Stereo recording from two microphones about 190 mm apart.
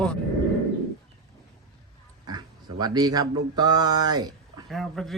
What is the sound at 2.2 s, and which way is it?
Speech, 20° right (ahead or behind).